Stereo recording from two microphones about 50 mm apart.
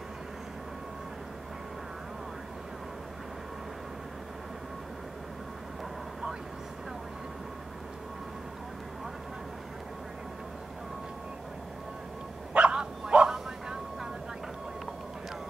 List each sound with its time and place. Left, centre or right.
12.5 s dog: centre